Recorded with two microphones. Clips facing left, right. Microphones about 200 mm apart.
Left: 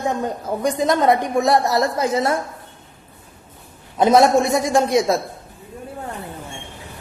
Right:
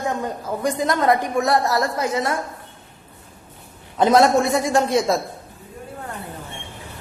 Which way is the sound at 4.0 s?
20° left (ahead or behind).